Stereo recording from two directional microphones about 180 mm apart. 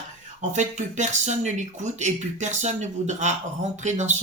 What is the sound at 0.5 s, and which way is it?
Speech, 40° right (ahead or behind).